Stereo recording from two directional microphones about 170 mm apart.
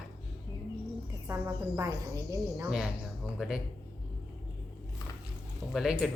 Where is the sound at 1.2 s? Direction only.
15° right (ahead or behind).